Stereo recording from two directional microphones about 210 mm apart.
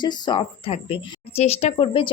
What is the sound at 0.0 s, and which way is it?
Speech, 20° left (ahead or behind).